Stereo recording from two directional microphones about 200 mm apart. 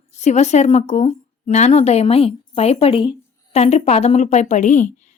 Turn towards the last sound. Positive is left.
turn(degrees=40)  # may be behind; listen again after turning